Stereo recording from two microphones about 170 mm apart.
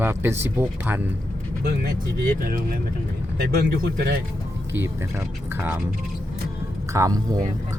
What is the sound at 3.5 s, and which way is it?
Speech, 65° right (ahead or behind).